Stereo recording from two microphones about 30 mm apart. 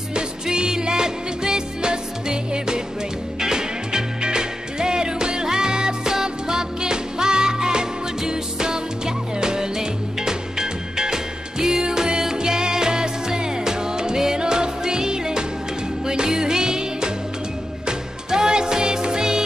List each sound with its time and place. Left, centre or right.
0.1 s music: right